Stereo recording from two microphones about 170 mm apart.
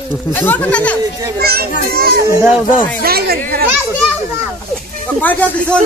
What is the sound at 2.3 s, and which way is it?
Speech, 10° right (ahead or behind).